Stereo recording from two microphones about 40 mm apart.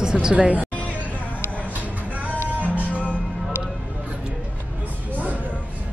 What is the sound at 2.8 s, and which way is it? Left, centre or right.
Music, left.